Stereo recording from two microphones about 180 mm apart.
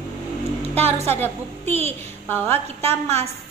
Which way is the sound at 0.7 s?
35° right (ahead or behind).